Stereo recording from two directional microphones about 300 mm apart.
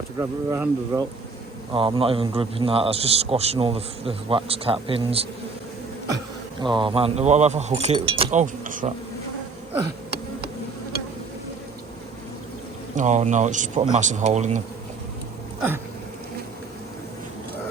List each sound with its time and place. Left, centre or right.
0.2 s a man's voice: centre
6.6 s a man's voice: centre
13.0 s a man's voice: right